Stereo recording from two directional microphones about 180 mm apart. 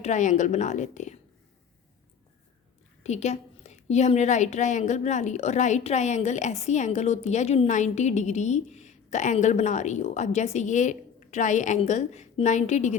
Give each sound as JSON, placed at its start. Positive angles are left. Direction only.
{"t": 0.0, "sound": "a woman's voice", "side_deg": 45}
{"t": 3.0, "sound": "a woman's voice", "side_deg": 40}